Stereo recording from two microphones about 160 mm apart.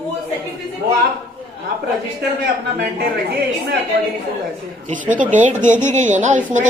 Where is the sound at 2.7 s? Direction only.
80° right.